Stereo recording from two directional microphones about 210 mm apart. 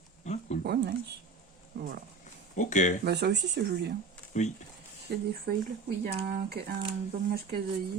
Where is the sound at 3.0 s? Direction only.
50° right (ahead or behind).